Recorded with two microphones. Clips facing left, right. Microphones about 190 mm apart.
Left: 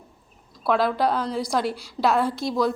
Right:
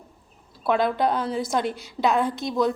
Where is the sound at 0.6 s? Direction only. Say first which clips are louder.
Even; centre (ahead or behind).